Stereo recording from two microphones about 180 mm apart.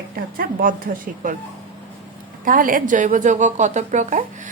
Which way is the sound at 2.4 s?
50° right (ahead or behind).